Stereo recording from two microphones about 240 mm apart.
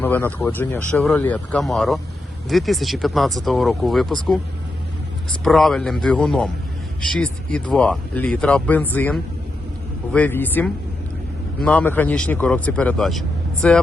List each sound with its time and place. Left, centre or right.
0.0 s speech: centre
5.4 s speech: centre